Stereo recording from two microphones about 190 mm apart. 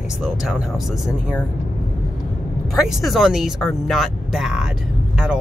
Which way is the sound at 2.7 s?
Centre (ahead or behind).